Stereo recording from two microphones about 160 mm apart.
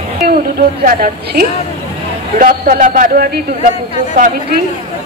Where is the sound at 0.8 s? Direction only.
65° right (ahead or behind).